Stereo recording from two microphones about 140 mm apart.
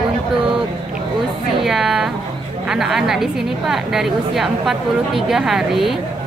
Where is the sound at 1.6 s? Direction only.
5° right (ahead or behind).